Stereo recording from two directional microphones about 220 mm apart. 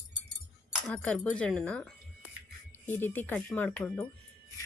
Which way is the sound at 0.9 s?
5° left (ahead or behind).